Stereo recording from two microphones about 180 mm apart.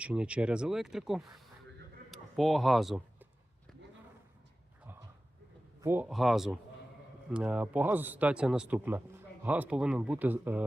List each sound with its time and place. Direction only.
0.0 s speech: 5° right (ahead or behind)
5.8 s a man's voice: 10° right (ahead or behind)
6.1 s a man's voice: centre (ahead or behind)